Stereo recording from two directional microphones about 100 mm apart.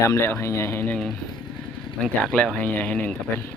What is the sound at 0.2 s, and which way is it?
Speech, 30° left (ahead or behind).